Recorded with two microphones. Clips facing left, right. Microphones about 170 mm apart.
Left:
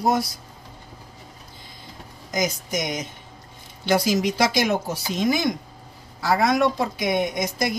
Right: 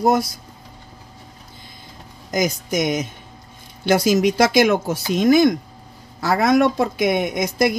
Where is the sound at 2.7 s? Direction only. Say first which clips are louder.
Right 6 dB; 55° right (ahead or behind).